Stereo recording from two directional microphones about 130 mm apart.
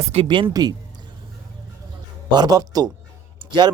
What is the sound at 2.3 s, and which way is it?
Speech, 30° right (ahead or behind).